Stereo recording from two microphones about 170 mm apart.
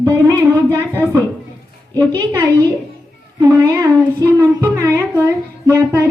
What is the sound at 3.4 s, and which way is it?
A woman's voice, 15° right (ahead or behind).